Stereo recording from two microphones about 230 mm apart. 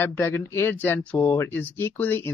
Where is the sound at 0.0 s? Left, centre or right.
Centre.